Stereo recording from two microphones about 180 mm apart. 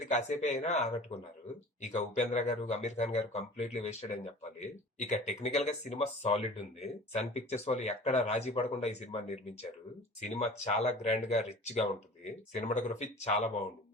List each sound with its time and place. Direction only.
0.1 s speech: 40° left (ahead or behind)